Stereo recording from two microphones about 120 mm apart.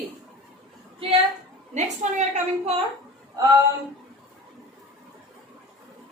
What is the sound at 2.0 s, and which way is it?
Speech, 80° right.